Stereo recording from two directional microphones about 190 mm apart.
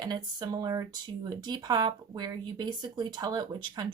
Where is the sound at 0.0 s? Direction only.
20° right (ahead or behind).